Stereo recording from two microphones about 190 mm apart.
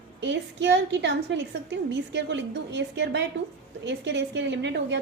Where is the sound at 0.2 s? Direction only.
70° right (ahead or behind).